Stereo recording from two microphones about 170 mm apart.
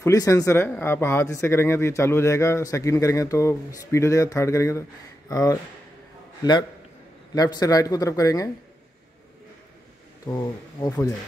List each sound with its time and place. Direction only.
0.0 s speech: 20° left (ahead or behind)
7.3 s speech: 20° left (ahead or behind)
10.2 s speech: 20° left (ahead or behind)